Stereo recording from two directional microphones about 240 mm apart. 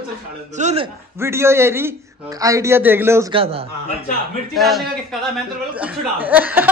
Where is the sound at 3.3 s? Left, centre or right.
Right.